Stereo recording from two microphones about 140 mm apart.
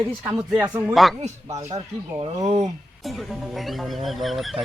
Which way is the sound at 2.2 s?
50° right (ahead or behind).